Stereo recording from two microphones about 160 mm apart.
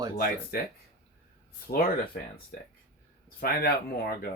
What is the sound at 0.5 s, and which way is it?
Speech, 70° left (ahead or behind).